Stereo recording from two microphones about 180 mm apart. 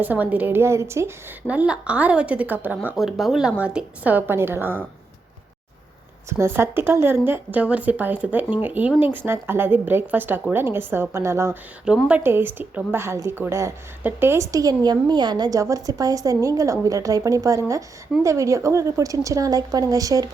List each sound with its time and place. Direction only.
0.0 s a woman's voice: 10° right (ahead or behind)
6.2 s a woman's voice: 15° right (ahead or behind)